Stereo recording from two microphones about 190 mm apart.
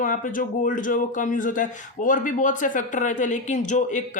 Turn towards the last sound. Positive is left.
turn(degrees=40)  # may be behind; listen again after turning